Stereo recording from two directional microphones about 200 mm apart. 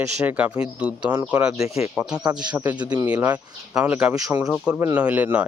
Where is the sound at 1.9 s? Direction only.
5° right (ahead or behind).